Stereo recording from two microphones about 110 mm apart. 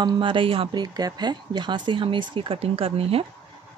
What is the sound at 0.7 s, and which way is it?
Speech, 40° right (ahead or behind).